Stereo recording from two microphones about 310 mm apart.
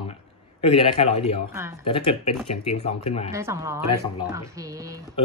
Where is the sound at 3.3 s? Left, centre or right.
Centre.